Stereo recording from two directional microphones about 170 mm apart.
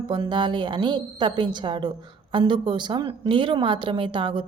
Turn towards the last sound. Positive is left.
turn(degrees=-30)  # may be behind; listen again after turning